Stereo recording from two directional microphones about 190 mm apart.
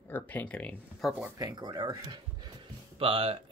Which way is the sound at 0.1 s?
10° left (ahead or behind).